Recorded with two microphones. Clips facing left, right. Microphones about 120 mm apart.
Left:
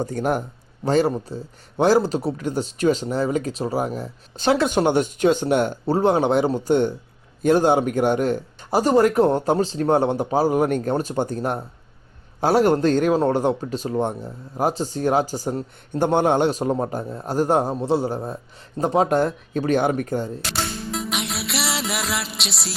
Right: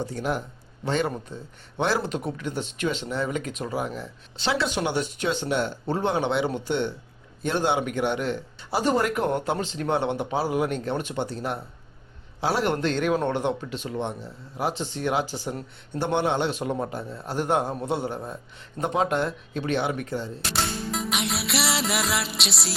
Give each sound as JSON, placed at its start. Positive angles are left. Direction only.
{"t": 0.0, "sound": "speech", "side_deg": 50}
{"t": 0.9, "sound": "speech", "side_deg": 35}
{"t": 20.5, "sound": "music", "side_deg": 0}